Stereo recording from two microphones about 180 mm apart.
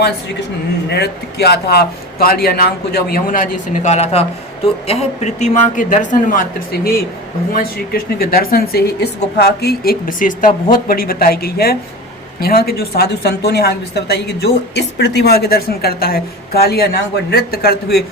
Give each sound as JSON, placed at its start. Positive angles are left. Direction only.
{"t": 0.9, "sound": "a man's voice", "side_deg": 65}
{"t": 7.5, "sound": "a man's voice", "side_deg": 55}